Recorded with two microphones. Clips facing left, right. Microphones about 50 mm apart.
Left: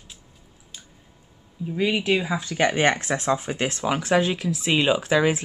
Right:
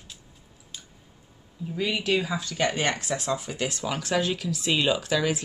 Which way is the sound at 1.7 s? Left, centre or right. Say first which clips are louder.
Left 4 dB; left.